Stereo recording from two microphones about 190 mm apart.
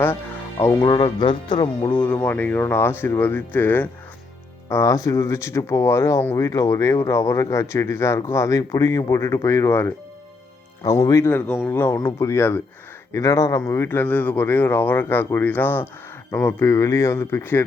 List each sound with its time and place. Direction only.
0.6 s speech: 15° left (ahead or behind)
2.0 s speech: 10° left (ahead or behind)